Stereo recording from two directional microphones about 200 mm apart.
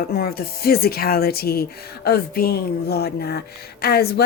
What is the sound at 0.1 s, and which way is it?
Speech, 50° left (ahead or behind).